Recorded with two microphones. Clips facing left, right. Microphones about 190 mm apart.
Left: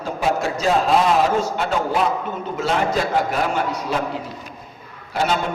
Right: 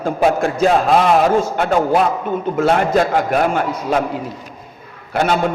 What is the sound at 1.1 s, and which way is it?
A man's voice, 55° right (ahead or behind).